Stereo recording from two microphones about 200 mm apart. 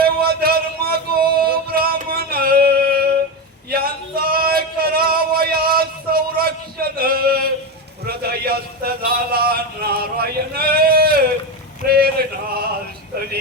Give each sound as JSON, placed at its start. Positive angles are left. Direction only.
{"t": 0.0, "sound": "music", "side_deg": -50}
{"t": 3.7, "sound": "male singing", "side_deg": -50}
{"t": 8.0, "sound": "a sound", "side_deg": -50}
{"t": 11.9, "sound": "male singing", "side_deg": -50}